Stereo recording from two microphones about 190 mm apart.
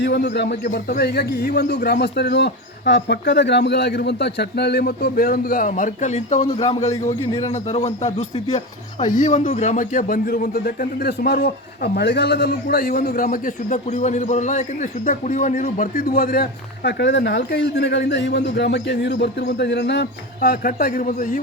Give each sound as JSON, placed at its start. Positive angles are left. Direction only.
{"t": 0.0, "sound": "a man's voice", "side_deg": 65}